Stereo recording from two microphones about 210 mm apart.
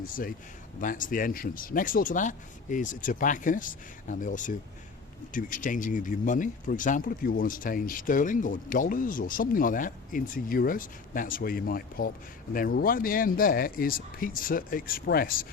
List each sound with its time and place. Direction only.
0.0 s speech: 40° left (ahead or behind)